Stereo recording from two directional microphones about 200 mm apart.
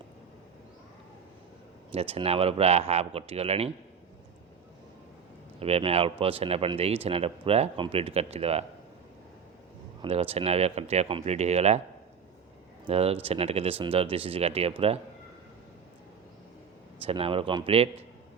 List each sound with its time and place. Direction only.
1.9 s speech: 30° right (ahead or behind)
5.5 s speech: 30° right (ahead or behind)
10.0 s speech: 30° right (ahead or behind)
12.9 s speech: 30° right (ahead or behind)
17.1 s speech: 25° right (ahead or behind)